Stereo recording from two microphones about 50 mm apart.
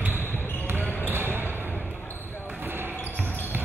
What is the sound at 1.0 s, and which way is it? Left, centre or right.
Basketball bounce, right.